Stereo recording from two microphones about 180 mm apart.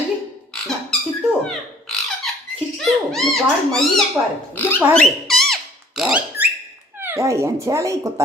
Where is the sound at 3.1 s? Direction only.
Centre (ahead or behind).